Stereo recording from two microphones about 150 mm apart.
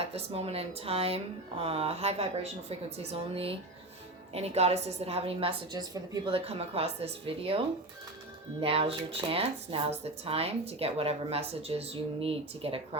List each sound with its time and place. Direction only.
0.0 s a woman's voice: 45° right (ahead or behind)
8.6 s speech: 40° right (ahead or behind)